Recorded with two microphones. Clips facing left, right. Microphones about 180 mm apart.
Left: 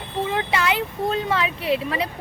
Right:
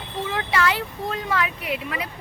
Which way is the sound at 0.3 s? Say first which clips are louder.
Even; 20° left (ahead or behind).